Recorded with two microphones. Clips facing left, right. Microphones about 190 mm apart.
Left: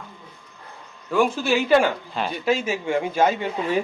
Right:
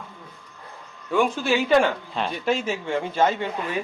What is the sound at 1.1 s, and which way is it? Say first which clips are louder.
Speech: left 1 dB; centre (ahead or behind).